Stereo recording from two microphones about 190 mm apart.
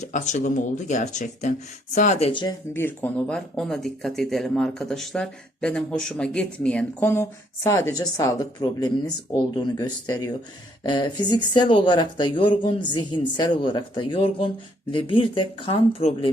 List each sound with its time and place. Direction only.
0.0 s speech: 40° left (ahead or behind); by 2.6 s 25° left (ahead or behind)
2.7 s speech: 10° left (ahead or behind); by 16.3 s 30° left (ahead or behind)